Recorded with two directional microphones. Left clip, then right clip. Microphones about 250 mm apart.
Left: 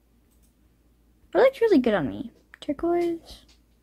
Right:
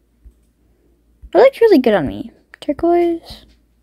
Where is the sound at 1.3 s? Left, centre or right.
Centre.